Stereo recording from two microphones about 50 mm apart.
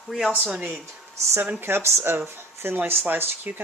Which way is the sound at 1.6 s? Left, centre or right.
Right.